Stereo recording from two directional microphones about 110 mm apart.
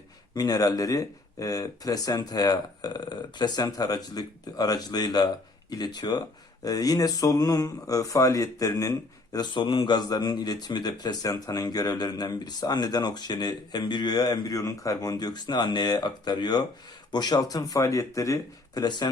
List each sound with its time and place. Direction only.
0.3 s speech: 35° left (ahead or behind)